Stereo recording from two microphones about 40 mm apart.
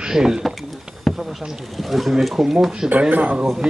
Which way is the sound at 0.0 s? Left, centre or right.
Centre.